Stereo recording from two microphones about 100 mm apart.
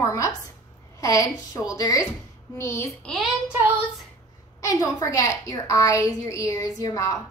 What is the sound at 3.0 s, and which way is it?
Speech, centre (ahead or behind).